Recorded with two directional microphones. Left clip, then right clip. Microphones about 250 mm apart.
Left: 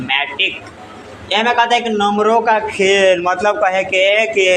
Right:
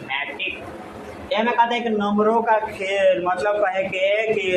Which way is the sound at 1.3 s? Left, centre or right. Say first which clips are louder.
Left 6 dB; left.